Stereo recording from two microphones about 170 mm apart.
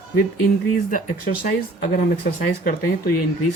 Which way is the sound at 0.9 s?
55° left (ahead or behind).